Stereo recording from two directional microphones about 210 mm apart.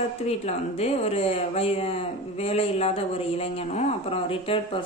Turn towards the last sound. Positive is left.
turn(degrees=25)  # may be behind; listen again after turning